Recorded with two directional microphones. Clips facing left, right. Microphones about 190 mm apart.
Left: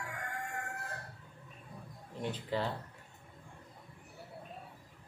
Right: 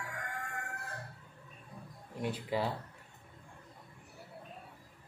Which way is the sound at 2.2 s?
10° right (ahead or behind).